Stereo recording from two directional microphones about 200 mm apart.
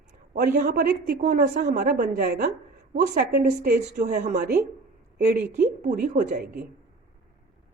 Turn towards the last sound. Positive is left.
turn(degrees=-5)  # may be behind; listen again after turning